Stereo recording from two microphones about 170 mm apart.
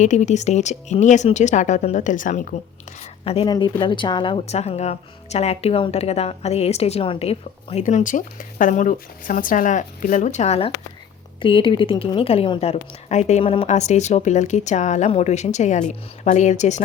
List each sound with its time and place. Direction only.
0.0 s a woman's voice: 45° left (ahead or behind)
3.0 s a sound: 35° left (ahead or behind)
3.4 s a woman's voice: 25° left (ahead or behind); by 16.8 s 45° left (ahead or behind)